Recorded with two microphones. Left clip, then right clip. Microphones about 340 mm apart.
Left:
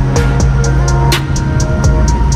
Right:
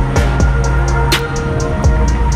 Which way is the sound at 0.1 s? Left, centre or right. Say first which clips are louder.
Left 2 dB; centre.